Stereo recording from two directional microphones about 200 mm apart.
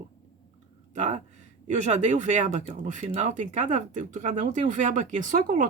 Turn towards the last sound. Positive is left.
turn(degrees=-40)  # may be behind; listen again after turning